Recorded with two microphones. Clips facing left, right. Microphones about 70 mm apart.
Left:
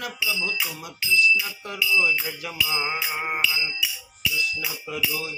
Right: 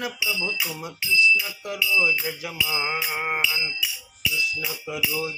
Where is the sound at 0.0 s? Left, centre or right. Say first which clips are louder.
Right 1 dB; centre.